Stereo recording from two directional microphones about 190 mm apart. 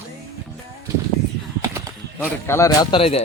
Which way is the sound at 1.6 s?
15° right (ahead or behind).